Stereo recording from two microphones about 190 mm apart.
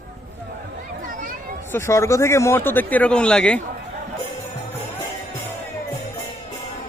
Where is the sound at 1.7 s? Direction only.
15° left (ahead or behind).